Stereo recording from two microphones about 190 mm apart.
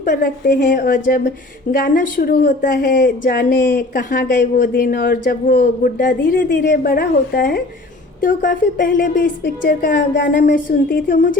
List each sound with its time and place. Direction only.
0.0 s a woman's voice: 50° left (ahead or behind)